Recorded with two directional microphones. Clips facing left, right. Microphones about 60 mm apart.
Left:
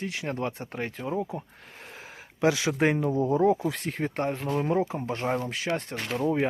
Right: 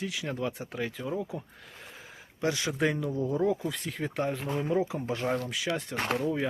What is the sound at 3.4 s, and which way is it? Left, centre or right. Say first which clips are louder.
Speech: left 5 dB; left.